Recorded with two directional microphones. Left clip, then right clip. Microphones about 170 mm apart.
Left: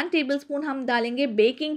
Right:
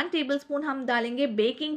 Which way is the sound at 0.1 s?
30° left (ahead or behind).